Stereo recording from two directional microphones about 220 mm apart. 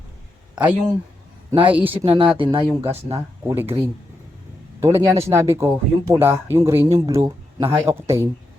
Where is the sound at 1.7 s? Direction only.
10° right (ahead or behind).